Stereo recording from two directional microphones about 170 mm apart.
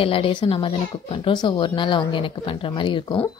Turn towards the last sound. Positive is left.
turn(degrees=30)  # may be behind; listen again after turning